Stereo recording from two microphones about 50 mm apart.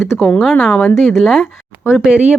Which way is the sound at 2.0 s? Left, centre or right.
Centre.